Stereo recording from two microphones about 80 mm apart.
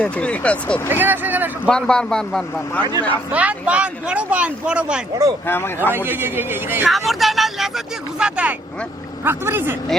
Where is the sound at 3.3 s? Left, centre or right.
Centre.